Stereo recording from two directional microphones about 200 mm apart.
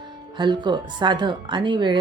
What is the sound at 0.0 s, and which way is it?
Speech, 20° right (ahead or behind).